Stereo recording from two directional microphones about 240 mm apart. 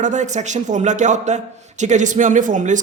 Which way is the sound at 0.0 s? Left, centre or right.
Right.